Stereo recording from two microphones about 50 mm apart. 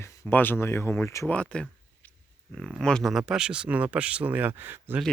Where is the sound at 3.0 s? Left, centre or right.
Centre.